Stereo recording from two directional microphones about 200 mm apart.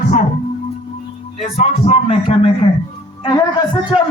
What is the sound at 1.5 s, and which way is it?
Speech, 30° left (ahead or behind).